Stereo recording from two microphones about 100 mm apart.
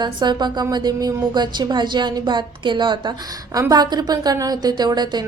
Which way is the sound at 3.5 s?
40° right (ahead or behind).